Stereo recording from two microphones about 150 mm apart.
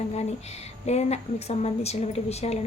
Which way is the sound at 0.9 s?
45° left (ahead or behind).